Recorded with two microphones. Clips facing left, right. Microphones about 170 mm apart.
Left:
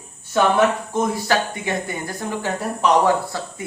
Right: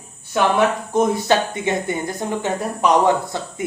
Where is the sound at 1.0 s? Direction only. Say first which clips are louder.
Right 4 dB; 20° right (ahead or behind).